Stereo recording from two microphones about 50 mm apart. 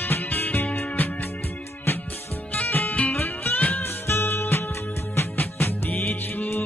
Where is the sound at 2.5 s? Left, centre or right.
Left.